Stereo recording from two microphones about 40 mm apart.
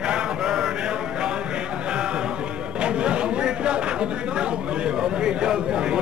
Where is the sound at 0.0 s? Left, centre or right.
Right.